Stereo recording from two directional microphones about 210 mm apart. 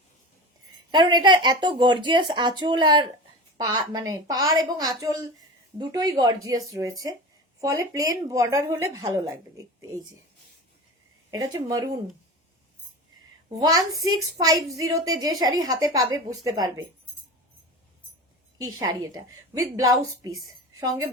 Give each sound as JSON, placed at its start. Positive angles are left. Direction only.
{"t": 0.9, "sound": "a woman's voice", "side_deg": -20}
{"t": 11.3, "sound": "a woman's voice", "side_deg": -15}
{"t": 13.6, "sound": "a woman's voice", "side_deg": -20}
{"t": 18.6, "sound": "a woman's voice", "side_deg": -20}